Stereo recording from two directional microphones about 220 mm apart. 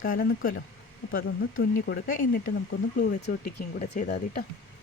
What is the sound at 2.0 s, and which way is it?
Speech, 40° left (ahead or behind).